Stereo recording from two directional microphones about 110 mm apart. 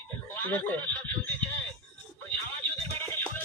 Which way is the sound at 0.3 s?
20° left (ahead or behind).